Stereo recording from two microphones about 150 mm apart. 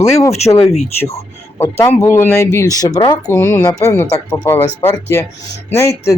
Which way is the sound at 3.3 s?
15° left (ahead or behind).